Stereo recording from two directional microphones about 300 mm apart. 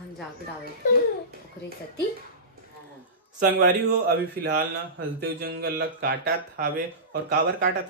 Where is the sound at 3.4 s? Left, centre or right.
Right.